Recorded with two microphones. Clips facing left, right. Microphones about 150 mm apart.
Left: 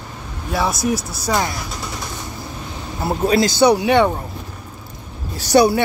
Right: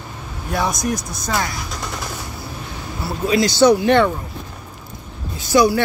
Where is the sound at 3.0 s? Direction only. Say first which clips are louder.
Left 2 dB; 45° left (ahead or behind).